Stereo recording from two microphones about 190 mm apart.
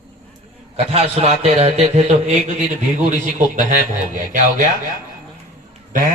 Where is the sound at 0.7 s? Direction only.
35° right (ahead or behind).